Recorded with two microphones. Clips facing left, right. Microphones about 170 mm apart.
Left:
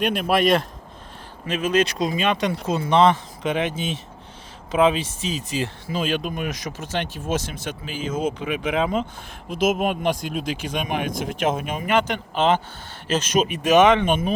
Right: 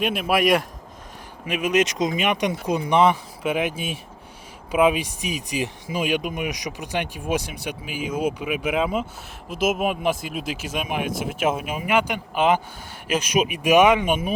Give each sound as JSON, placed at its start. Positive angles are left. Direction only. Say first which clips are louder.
{"t": 0.0, "sound": "speech", "louder": "left 1 dB", "side_deg": -5}